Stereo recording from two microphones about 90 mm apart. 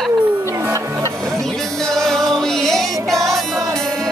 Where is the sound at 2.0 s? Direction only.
5° left (ahead or behind).